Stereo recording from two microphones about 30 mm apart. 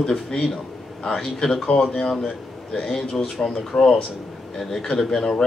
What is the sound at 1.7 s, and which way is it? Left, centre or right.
A man's voice, centre.